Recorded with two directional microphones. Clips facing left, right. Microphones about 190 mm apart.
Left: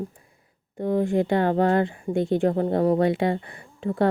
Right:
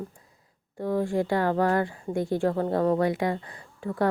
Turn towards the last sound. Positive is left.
turn(degrees=25)  # may be behind; listen again after turning